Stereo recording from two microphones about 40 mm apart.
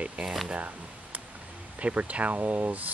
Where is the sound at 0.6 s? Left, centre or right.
Right.